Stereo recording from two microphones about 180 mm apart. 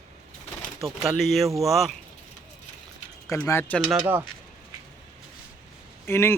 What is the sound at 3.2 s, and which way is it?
Speech, 15° left (ahead or behind).